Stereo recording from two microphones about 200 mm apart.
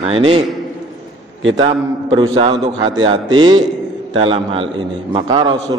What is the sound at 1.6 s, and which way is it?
A man's voice, 25° right (ahead or behind).